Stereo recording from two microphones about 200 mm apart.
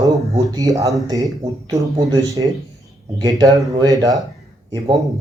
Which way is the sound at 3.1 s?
20° right (ahead or behind).